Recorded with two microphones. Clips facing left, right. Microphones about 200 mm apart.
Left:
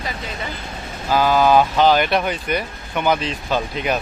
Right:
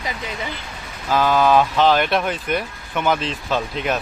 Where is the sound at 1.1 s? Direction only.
Centre (ahead or behind).